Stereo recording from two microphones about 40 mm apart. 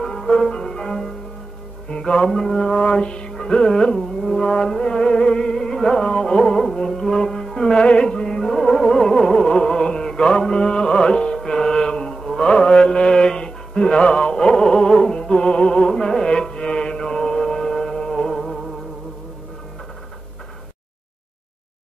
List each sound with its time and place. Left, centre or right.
0.0 s music: centre
1.9 s music: left
3.9 s music: centre
7.8 s music: left
12.4 s mantra: left
14.3 s music: centre